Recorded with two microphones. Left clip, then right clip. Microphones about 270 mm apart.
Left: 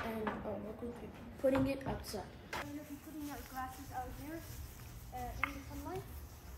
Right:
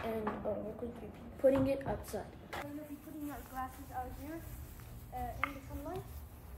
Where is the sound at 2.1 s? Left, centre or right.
Centre.